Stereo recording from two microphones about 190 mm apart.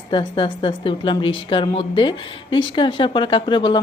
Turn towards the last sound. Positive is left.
turn(degrees=25)  # may be behind; listen again after turning